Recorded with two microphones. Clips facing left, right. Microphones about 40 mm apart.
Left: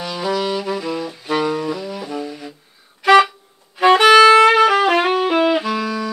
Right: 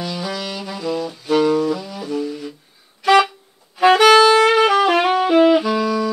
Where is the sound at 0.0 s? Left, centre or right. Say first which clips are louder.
Left 4 dB; centre.